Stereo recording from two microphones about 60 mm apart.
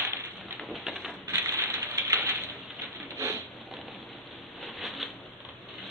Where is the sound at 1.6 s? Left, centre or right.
Right.